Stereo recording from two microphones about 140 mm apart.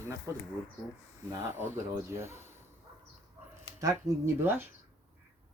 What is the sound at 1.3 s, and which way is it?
Speech, 20° right (ahead or behind).